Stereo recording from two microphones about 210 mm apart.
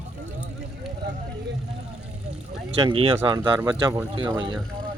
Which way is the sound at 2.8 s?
25° right (ahead or behind).